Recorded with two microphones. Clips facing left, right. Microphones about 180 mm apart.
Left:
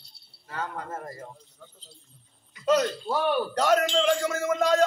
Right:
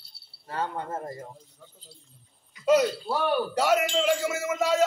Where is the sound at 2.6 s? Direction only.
10° right (ahead or behind).